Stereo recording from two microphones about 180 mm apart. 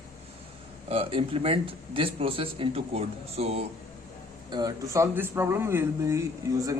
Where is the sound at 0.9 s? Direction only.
30° right (ahead or behind).